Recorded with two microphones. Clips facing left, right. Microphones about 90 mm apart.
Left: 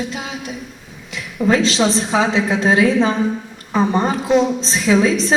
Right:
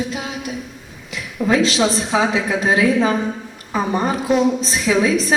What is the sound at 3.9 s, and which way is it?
A woman's voice, 30° left (ahead or behind).